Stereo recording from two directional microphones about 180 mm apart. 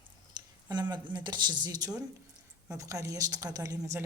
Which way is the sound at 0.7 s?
20° right (ahead or behind).